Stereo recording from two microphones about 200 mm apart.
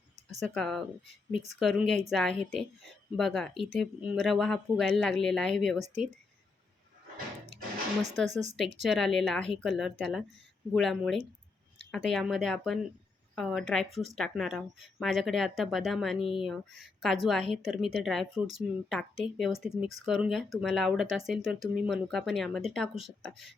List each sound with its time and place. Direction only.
0.3 s speech: centre (ahead or behind)
8.3 s speech: 35° right (ahead or behind)
8.8 s speech: centre (ahead or behind)